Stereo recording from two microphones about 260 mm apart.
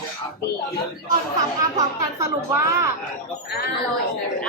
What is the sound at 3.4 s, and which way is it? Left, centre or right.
Speech, left.